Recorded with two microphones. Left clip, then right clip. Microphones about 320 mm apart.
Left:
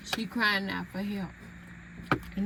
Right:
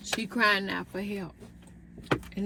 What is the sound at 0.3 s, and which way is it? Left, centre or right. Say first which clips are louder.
Speech: right 3 dB; centre.